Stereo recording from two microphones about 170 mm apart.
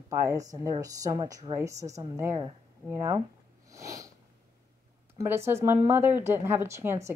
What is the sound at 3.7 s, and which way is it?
Sniff, 20° right (ahead or behind).